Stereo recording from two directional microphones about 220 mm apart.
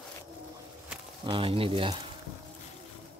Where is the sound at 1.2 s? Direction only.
25° right (ahead or behind).